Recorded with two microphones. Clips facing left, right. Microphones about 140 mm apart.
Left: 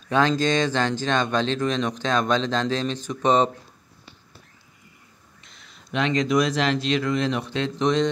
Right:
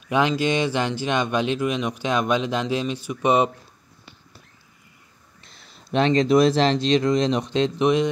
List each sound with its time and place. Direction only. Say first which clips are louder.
0.1 s speech: even; 15° right (ahead or behind)
5.4 s speech: right 3 dB; 35° right (ahead or behind); by 8.1 s 10° right (ahead or behind)